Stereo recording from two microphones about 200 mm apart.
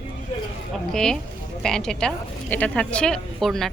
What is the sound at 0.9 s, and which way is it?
A woman's voice, 5° left (ahead or behind).